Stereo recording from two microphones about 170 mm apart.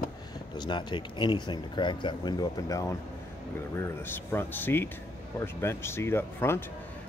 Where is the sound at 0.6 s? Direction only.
25° left (ahead or behind).